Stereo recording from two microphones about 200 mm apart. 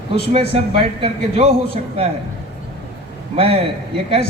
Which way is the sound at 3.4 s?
25° right (ahead or behind).